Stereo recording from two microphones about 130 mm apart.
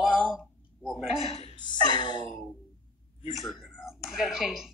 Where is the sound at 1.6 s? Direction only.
35° left (ahead or behind).